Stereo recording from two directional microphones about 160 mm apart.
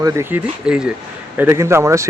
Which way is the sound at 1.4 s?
15° right (ahead or behind).